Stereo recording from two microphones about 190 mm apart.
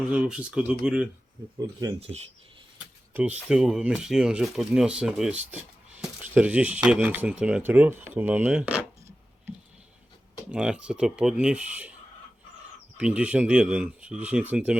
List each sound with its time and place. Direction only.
0.1 s speech: 5° right (ahead or behind)
1.5 s speech: 20° right (ahead or behind)
2.0 s speech: 30° right (ahead or behind)
3.1 s speech: 10° right (ahead or behind)
10.5 s speech: 5° right (ahead or behind)
13.0 s speech: 5° right (ahead or behind)